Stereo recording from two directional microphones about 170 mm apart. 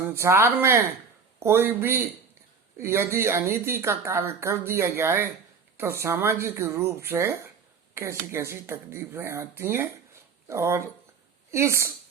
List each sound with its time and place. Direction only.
0.0 s speech: 15° right (ahead or behind)